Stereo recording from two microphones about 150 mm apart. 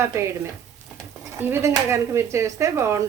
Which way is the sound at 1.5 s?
15° right (ahead or behind).